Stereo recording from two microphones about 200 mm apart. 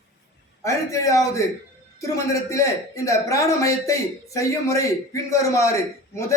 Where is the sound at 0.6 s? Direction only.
15° left (ahead or behind).